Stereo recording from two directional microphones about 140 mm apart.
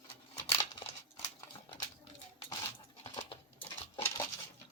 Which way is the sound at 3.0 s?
40° left (ahead or behind).